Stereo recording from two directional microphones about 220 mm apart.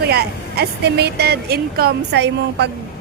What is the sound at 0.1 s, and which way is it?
Speech, 45° right (ahead or behind).